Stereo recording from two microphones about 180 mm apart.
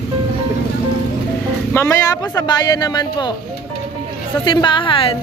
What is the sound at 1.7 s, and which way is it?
Speech, 15° left (ahead or behind).